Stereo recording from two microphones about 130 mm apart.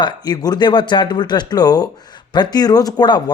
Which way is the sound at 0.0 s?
30° left (ahead or behind).